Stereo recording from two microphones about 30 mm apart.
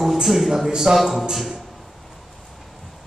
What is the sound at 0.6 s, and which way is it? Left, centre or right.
Speech, centre.